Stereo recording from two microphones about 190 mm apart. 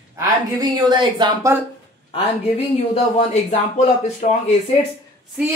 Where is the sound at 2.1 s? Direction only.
35° left (ahead or behind).